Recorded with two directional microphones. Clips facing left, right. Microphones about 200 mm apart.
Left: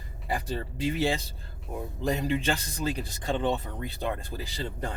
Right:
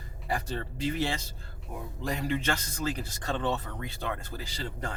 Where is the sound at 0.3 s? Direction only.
15° left (ahead or behind).